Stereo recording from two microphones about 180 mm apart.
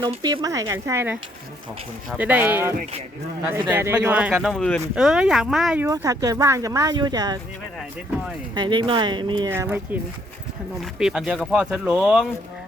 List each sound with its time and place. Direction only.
0.0 s speech: 25° right (ahead or behind); by 4.5 s 10° right (ahead or behind)
4.5 s speech: 5° left (ahead or behind)
5.8 s speech: 20° right (ahead or behind)
8.5 s speech: 25° right (ahead or behind)
9.5 s speech: 10° right (ahead or behind)
11.0 s speech: 5° right (ahead or behind)